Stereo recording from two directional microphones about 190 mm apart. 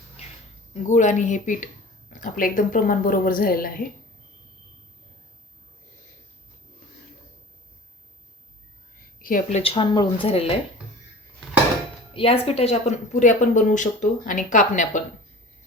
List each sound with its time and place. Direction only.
0.7 s speech: 40° left (ahead or behind)
9.1 s a woman's voice: 45° left (ahead or behind); by 10.5 s 30° left (ahead or behind)
12.1 s a woman's voice: 30° left (ahead or behind)